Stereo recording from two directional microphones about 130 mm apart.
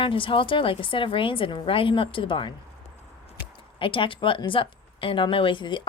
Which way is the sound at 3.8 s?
40° left (ahead or behind).